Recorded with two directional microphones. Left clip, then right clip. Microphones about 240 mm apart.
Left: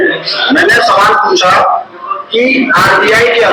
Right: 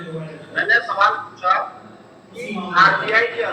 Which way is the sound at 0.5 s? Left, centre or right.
Left.